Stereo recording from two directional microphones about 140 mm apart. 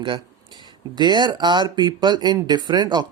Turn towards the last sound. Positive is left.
turn(degrees=-30)  # may be behind; listen again after turning